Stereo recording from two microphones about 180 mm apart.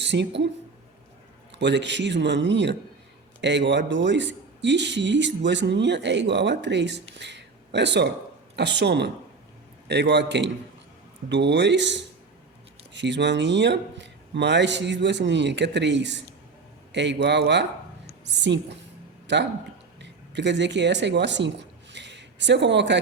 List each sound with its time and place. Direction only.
0.0 s speech: 75° right (ahead or behind)
1.5 s speech: 75° right (ahead or behind)
7.2 s a sound: 75° right (ahead or behind)
8.5 s speech: 70° right (ahead or behind)
20.0 s speech: 75° right (ahead or behind)